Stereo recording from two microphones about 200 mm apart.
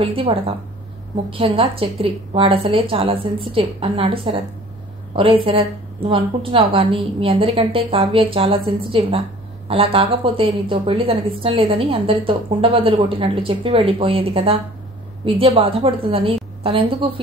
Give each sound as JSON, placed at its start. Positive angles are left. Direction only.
{"t": 0.0, "sound": "a woman's voice", "side_deg": -25}